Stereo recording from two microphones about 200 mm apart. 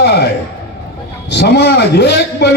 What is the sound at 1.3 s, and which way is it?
A man's voice, 55° left (ahead or behind).